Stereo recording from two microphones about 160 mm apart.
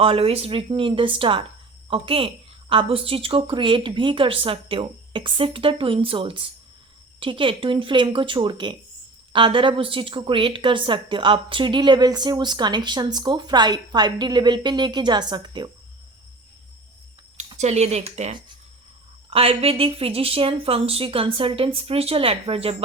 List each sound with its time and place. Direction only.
0.0 s a woman's voice: 35° right (ahead or behind)
17.6 s a woman's voice: 45° right (ahead or behind)